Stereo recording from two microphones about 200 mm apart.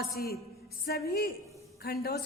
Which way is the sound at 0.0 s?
50° left (ahead or behind).